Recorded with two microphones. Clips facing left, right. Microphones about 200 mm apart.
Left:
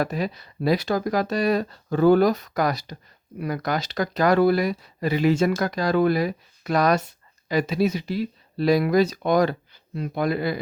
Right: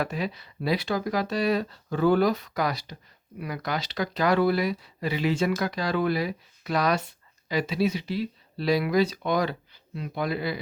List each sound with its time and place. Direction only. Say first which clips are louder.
0.0 s speech: left 4 dB; 40° left (ahead or behind)